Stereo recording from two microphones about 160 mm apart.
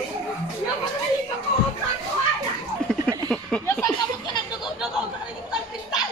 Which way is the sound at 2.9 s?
5° left (ahead or behind).